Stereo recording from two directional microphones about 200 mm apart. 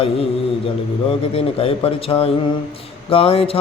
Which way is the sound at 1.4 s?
30° left (ahead or behind).